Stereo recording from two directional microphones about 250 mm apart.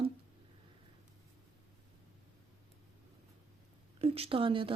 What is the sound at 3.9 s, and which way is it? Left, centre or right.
Speech, right.